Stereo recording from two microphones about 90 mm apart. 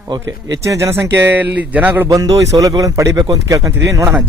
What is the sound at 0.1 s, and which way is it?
Speech, 40° right (ahead or behind).